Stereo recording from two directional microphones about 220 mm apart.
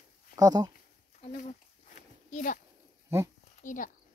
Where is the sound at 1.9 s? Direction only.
35° left (ahead or behind).